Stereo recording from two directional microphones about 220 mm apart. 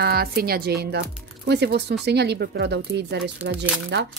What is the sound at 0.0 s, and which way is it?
A woman's voice, 45° right (ahead or behind).